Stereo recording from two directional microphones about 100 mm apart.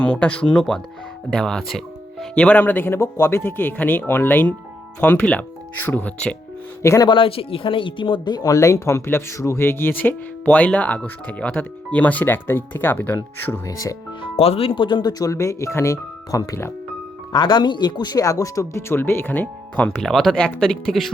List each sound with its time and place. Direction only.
0.0 s speech: 10° left (ahead or behind)
6.8 s speech: 35° left (ahead or behind)
7.1 s speech: 65° left (ahead or behind); by 8.5 s 45° left (ahead or behind)
8.5 s speech: 30° left (ahead or behind)
13.7 s speech: 35° left (ahead or behind)
14.2 s speech: 75° left (ahead or behind); by 15.1 s 50° left (ahead or behind)
15.2 s speech: 35° left (ahead or behind)
17.3 s speech: 50° left (ahead or behind); by 21.1 s 5° left (ahead or behind)